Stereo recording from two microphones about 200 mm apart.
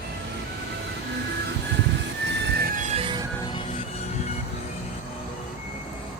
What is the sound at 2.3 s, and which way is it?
Music, 55° right (ahead or behind).